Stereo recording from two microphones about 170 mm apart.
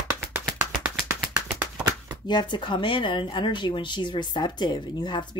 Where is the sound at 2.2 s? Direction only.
25° left (ahead or behind).